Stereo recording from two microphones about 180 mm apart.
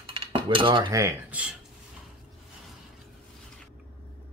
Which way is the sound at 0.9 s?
15° right (ahead or behind).